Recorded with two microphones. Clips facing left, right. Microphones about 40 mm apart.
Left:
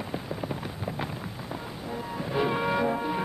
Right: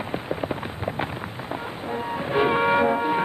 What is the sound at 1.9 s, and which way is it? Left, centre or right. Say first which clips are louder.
Music: right 6 dB; right.